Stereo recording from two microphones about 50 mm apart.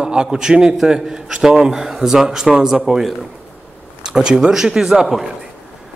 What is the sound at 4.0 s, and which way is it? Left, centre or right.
A man's voice, centre.